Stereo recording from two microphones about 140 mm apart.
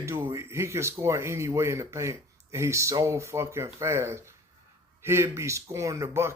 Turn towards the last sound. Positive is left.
turn(degrees=-20)  # may be behind; listen again after turning